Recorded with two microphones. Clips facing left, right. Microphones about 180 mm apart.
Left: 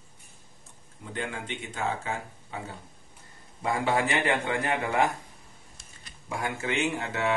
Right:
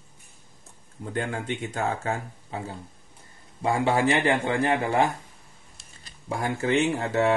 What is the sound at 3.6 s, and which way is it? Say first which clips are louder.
Speech: right 4 dB; 30° right (ahead or behind).